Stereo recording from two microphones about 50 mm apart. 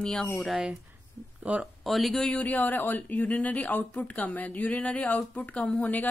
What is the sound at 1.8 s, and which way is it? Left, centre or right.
Speech, centre.